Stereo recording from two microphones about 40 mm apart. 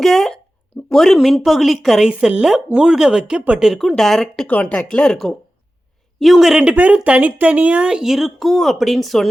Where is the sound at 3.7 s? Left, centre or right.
Centre.